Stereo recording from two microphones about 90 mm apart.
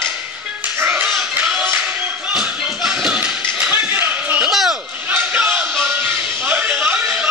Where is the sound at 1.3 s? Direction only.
15° right (ahead or behind).